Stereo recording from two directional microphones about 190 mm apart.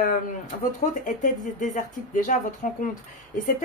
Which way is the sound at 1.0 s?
45° left (ahead or behind).